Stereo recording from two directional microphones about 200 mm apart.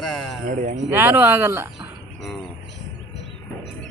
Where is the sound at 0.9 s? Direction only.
10° right (ahead or behind).